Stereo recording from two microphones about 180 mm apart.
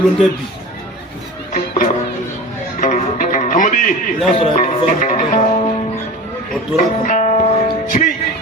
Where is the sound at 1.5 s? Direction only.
45° left (ahead or behind).